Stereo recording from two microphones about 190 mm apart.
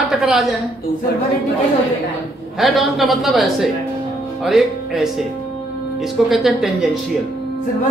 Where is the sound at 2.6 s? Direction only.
Centre (ahead or behind).